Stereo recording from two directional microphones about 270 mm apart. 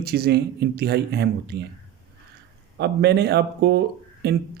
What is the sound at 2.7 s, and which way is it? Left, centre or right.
Speech, right.